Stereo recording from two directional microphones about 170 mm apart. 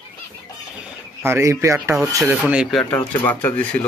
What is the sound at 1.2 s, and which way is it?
Speech, 15° right (ahead or behind).